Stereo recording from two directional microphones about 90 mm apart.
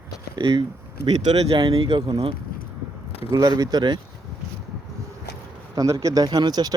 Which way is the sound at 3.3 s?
40° right (ahead or behind).